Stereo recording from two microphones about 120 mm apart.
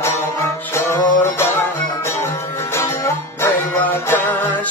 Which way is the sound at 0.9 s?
20° left (ahead or behind).